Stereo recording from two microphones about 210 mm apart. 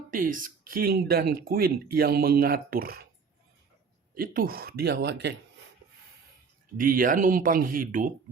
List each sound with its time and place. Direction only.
0.1 s speech: 40° right (ahead or behind)
4.1 s speech: 45° right (ahead or behind)
6.7 s speech: 40° right (ahead or behind)